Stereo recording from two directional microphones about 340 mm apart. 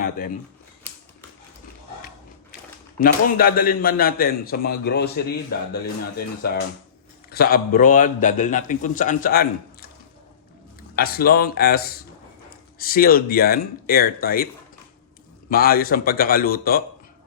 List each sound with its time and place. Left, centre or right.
3.0 s a man's voice: left
10.9 s a man's voice: left
15.4 s a man's voice: left